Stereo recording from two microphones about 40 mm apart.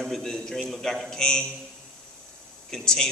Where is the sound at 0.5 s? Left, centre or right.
Centre.